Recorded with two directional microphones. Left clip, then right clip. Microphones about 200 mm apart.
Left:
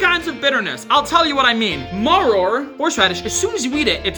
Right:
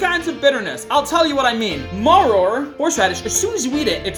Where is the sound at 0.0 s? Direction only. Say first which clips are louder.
Even; 20° left (ahead or behind).